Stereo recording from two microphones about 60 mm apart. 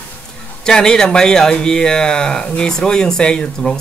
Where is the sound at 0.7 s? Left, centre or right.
Centre.